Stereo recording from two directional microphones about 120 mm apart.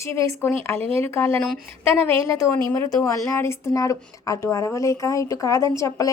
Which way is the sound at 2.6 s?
20° left (ahead or behind).